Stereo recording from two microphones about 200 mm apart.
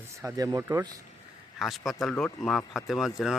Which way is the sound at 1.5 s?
Centre (ahead or behind).